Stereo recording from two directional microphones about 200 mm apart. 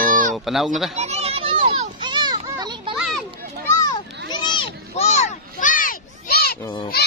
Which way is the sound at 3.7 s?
15° left (ahead or behind).